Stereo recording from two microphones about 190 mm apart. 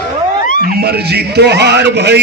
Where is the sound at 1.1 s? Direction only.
60° right (ahead or behind).